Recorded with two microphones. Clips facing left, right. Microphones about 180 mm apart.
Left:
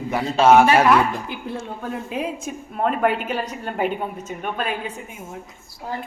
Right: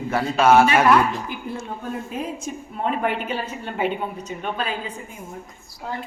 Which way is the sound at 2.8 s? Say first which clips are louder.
Left 4 dB; 50° left (ahead or behind).